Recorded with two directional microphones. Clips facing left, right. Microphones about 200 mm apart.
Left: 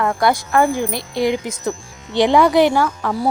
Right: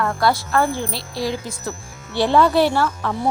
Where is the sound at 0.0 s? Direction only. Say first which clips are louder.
Left 2 dB; 15° left (ahead or behind).